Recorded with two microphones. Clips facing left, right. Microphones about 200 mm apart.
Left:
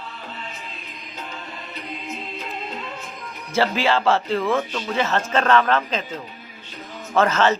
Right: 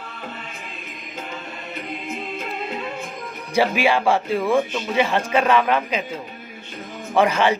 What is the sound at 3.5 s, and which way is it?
A man's voice, 15° right (ahead or behind).